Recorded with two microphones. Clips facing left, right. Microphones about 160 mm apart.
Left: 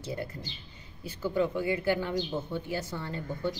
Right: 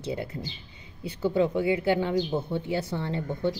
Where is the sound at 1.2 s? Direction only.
20° right (ahead or behind).